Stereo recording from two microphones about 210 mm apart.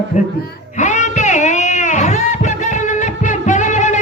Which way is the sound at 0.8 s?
35° left (ahead or behind).